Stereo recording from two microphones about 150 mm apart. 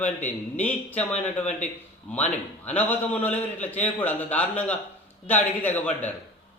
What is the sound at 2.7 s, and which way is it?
A man's voice, 10° left (ahead or behind).